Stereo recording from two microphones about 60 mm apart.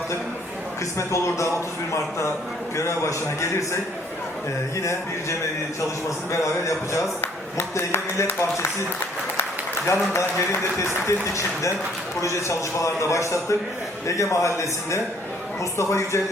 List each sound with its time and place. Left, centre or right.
0.9 s a man's voice: left
4.8 s a man's voice: left
7.8 s a man's voice: left